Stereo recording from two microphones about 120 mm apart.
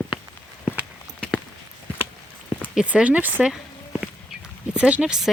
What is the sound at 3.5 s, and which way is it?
Walk, 5° right (ahead or behind).